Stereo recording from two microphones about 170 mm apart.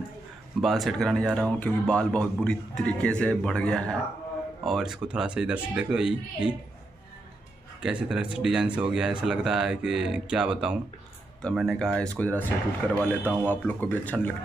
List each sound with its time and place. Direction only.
0.6 s speech: centre (ahead or behind)
7.8 s speech: 5° right (ahead or behind)